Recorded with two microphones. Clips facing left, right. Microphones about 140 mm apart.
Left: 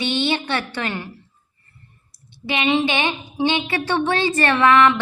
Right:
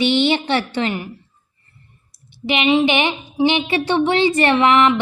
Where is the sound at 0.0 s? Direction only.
20° right (ahead or behind).